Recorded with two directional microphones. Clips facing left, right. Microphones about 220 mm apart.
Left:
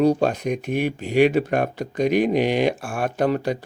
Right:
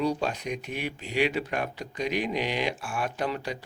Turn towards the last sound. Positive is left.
turn(degrees=50)  # may be behind; listen again after turning